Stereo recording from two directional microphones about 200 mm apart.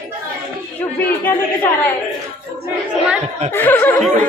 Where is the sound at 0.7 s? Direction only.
10° left (ahead or behind).